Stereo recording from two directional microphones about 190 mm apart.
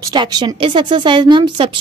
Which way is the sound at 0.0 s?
20° right (ahead or behind).